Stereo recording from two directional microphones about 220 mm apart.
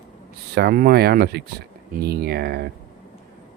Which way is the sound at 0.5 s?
45° right (ahead or behind).